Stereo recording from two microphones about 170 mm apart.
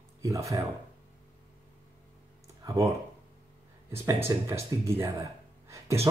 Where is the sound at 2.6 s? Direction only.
20° right (ahead or behind).